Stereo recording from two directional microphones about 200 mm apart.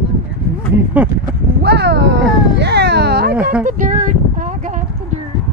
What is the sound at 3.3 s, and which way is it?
Speech, 5° right (ahead or behind).